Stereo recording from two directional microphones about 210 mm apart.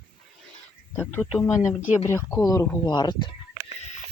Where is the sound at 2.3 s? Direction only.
15° left (ahead or behind).